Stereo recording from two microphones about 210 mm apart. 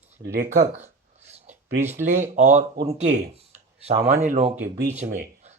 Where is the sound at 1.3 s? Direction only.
35° right (ahead or behind).